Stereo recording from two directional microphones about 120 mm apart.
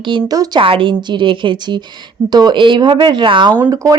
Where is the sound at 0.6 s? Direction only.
45° right (ahead or behind).